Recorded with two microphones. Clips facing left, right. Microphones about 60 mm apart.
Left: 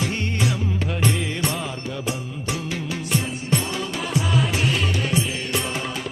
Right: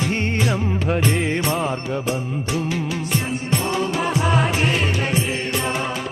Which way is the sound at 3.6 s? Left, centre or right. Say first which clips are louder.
Right 6 dB; right.